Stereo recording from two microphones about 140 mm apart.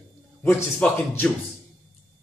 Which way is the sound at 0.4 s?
15° left (ahead or behind).